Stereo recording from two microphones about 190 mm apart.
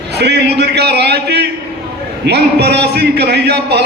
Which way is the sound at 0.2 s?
60° right (ahead or behind).